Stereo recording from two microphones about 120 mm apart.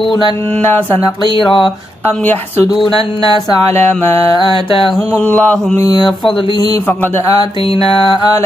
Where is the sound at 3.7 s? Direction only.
20° left (ahead or behind).